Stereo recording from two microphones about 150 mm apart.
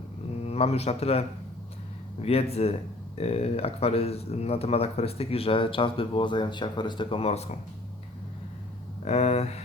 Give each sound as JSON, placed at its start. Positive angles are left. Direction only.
{"t": 0.4, "sound": "a man's voice", "side_deg": 45}
{"t": 2.2, "sound": "speech", "side_deg": 40}
{"t": 9.0, "sound": "speech", "side_deg": 45}